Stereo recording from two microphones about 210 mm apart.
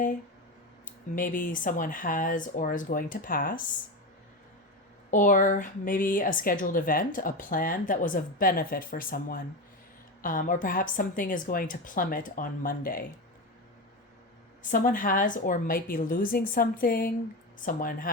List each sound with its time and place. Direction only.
0.9 s a woman's voice: 40° left (ahead or behind)
5.1 s a woman's voice: 40° left (ahead or behind)
14.6 s a woman's voice: 40° left (ahead or behind)